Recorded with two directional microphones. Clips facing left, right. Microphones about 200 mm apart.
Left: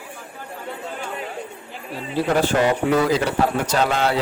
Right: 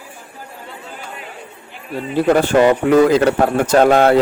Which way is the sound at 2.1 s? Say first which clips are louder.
Right 6 dB; 55° right (ahead or behind).